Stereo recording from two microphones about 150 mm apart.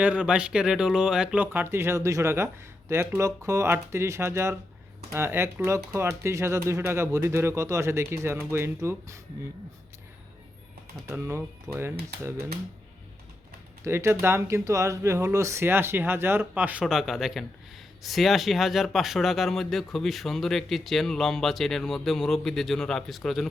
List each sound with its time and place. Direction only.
0.0 s speech: 5° right (ahead or behind)
11.0 s speech: 20° right (ahead or behind)
13.8 s speech: 20° right (ahead or behind); by 23.5 s centre (ahead or behind)